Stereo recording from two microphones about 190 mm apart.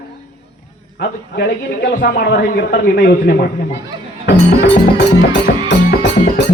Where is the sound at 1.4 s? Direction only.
55° left (ahead or behind).